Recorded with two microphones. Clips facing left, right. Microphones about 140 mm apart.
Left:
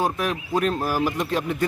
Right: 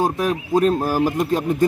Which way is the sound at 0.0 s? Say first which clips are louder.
Right 4 dB; 35° right (ahead or behind).